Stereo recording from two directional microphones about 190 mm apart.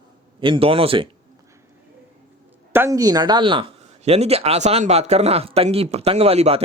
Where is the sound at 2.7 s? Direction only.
15° right (ahead or behind); by 6.6 s 30° right (ahead or behind).